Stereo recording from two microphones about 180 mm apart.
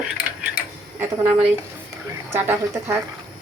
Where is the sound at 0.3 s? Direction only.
5° right (ahead or behind).